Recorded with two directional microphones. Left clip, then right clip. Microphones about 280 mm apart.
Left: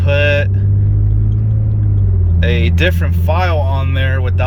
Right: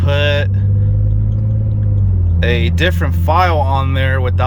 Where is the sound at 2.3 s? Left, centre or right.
Centre.